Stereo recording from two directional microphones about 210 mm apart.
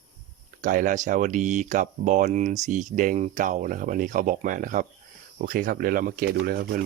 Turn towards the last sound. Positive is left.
turn(degrees=-45)  # may be behind; listen again after turning